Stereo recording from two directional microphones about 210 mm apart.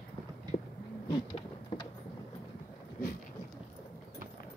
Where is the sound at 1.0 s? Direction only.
20° left (ahead or behind).